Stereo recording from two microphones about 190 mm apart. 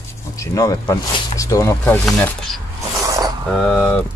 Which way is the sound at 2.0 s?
Centre (ahead or behind).